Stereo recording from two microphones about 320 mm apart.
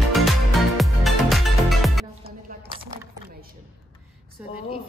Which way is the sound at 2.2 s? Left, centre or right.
Right.